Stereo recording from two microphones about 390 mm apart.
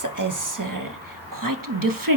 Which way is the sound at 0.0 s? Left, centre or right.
Right.